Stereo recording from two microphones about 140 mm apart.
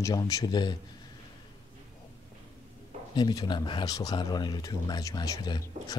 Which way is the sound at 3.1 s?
30° left (ahead or behind).